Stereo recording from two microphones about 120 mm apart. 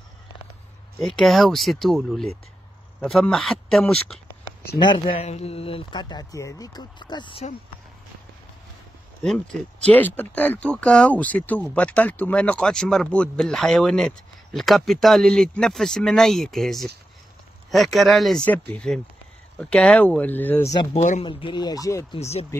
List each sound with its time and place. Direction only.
0.9 s speech: centre (ahead or behind)
4.7 s speech: 40° left (ahead or behind)
9.2 s speech: 5° left (ahead or behind)
20.9 s speech: 80° left
21.2 s speech: 45° left (ahead or behind); by 22.0 s 30° left (ahead or behind)
22.2 s speech: 60° left (ahead or behind)